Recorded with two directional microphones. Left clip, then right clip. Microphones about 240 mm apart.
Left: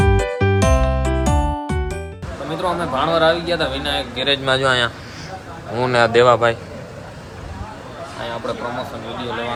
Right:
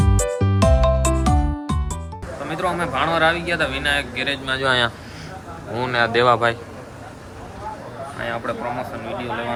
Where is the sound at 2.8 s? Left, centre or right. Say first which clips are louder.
Left 2 dB; centre.